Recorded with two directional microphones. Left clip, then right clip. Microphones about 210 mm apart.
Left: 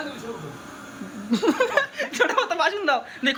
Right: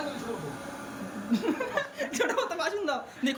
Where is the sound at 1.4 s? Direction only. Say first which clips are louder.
Left 11 dB; 25° left (ahead or behind).